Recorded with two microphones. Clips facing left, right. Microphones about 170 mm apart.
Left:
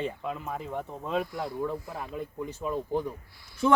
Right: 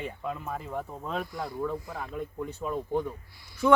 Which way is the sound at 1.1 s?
5° left (ahead or behind).